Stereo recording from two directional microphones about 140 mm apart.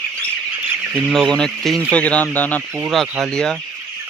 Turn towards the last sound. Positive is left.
turn(degrees=5)  # may be behind; listen again after turning